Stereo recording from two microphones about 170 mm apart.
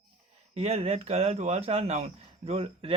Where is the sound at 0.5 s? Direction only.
35° right (ahead or behind).